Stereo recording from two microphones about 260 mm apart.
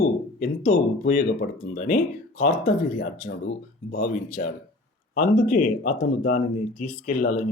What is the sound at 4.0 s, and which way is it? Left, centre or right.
Speech, left.